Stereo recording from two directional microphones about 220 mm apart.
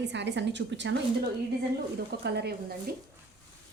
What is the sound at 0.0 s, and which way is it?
Speech, 50° right (ahead or behind).